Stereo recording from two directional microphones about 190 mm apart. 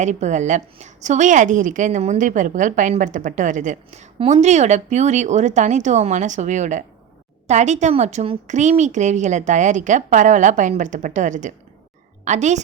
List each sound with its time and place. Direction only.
0.0 s a woman's voice: 40° right (ahead or behind)